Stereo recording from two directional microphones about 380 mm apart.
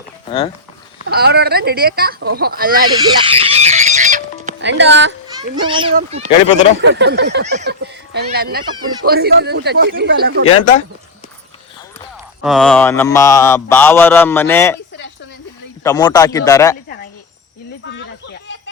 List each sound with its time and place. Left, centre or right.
0.3 s a man's voice: centre
1.0 s speech: right
2.9 s music: centre; by 5.1 s right
5.3 s a child's voice: centre
6.8 s speech: right
10.4 s speech: left
12.4 s mantra: centre
15.8 s a man's voice: centre
17.8 s a sound: left